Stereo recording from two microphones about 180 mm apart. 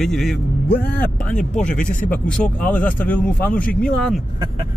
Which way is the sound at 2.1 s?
5° left (ahead or behind).